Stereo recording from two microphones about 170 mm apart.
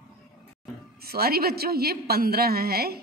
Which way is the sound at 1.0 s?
65° right (ahead or behind).